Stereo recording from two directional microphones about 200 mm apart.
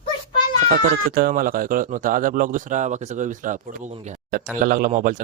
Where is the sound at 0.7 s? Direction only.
45° right (ahead or behind).